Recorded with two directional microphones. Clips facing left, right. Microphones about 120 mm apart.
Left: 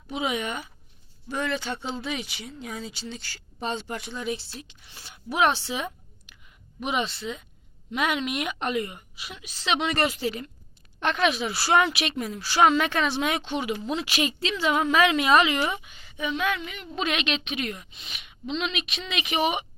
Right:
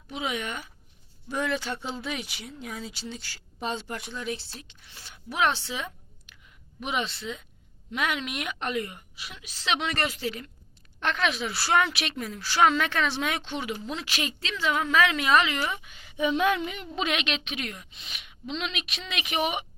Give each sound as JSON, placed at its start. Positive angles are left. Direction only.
{"t": 0.1, "sound": "a woman's voice", "side_deg": 10}
{"t": 1.3, "sound": "a woman's voice", "side_deg": -5}
{"t": 15.8, "sound": "speech", "side_deg": 0}
{"t": 16.1, "sound": "speech", "side_deg": -25}
{"t": 16.9, "sound": "speech", "side_deg": -5}